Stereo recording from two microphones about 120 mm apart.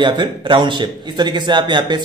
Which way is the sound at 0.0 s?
40° right (ahead or behind).